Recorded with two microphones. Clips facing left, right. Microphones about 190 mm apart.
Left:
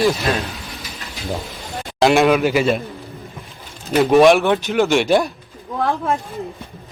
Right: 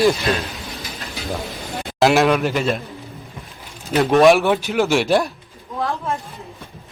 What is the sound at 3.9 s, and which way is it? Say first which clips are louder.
Speech: left 1 dB; centre (ahead or behind).